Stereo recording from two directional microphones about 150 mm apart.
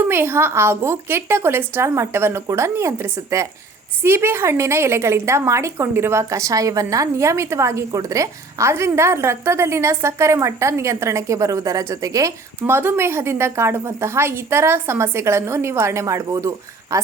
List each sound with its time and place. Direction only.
0.1 s a woman's voice: 15° right (ahead or behind)